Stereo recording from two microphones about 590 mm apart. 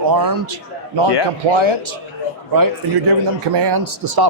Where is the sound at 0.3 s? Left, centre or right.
Right.